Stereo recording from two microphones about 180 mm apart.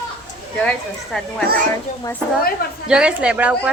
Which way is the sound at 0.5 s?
5° left (ahead or behind).